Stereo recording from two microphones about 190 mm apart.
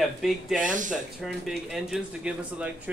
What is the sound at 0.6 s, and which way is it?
Speech, 40° right (ahead or behind).